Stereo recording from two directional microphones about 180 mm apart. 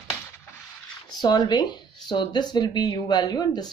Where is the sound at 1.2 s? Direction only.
25° left (ahead or behind).